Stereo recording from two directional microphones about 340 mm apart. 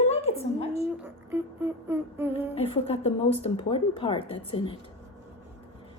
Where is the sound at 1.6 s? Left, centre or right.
Centre.